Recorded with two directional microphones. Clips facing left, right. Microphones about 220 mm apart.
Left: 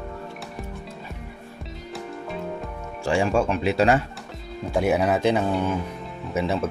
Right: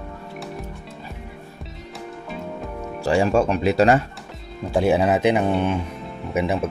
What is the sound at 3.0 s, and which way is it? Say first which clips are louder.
Speech: right 3 dB; 40° right (ahead or behind).